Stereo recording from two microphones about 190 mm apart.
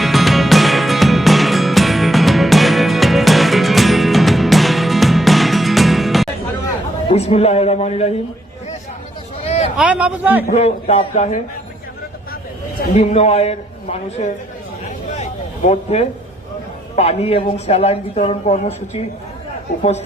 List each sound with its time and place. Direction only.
0.0 s music: centre (ahead or behind)
7.1 s speech: 35° left (ahead or behind)
9.7 s a man's voice: 5° right (ahead or behind)
10.4 s speech: 35° left (ahead or behind)
12.9 s speech: 35° left (ahead or behind)
15.2 s a sound: 35° left (ahead or behind)
16.9 s speech: 35° left (ahead or behind)